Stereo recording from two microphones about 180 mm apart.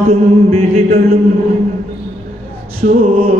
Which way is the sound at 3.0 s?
35° right (ahead or behind).